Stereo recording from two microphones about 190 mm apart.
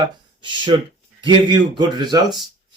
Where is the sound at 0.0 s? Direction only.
25° right (ahead or behind).